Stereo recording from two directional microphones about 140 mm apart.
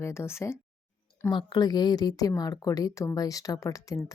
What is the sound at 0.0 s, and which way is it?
Speech, 20° left (ahead or behind).